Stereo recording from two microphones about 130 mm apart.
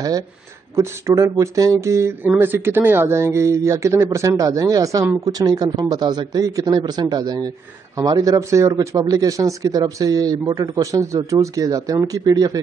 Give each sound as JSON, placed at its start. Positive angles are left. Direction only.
{"t": 0.7, "sound": "a man's voice", "side_deg": -25}